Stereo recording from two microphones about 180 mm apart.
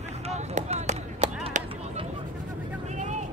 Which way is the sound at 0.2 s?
35° right (ahead or behind).